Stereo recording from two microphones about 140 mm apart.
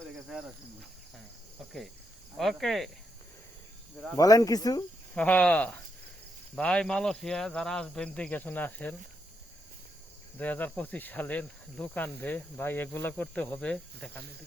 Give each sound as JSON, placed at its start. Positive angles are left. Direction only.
{"t": 2.4, "sound": "cricket", "side_deg": 0}
{"t": 4.2, "sound": "speech", "side_deg": 25}
{"t": 5.1, "sound": "cricket", "side_deg": 10}
{"t": 10.3, "sound": "cricket", "side_deg": 10}